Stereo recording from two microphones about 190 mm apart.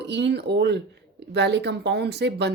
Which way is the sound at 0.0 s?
65° right (ahead or behind).